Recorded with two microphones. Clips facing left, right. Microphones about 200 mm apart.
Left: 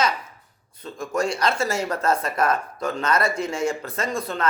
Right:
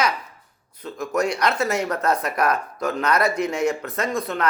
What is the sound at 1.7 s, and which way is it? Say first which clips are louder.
Speech: right 1 dB; 30° left (ahead or behind).